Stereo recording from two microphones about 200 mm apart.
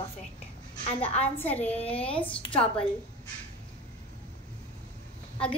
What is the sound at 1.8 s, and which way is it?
Speech, 30° left (ahead or behind).